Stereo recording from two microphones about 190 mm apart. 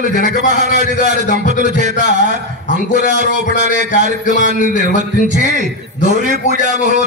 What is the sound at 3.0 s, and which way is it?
Speech, 40° left (ahead or behind).